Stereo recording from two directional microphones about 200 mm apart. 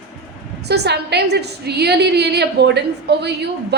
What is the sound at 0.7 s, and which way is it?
A woman's voice, 55° right (ahead or behind).